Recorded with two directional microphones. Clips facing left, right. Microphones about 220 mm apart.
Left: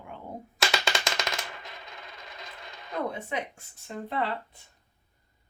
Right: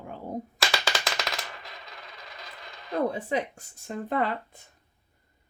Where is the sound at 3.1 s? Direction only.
35° right (ahead or behind).